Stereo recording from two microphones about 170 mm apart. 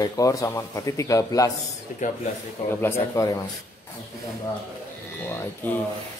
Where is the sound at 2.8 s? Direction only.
15° left (ahead or behind).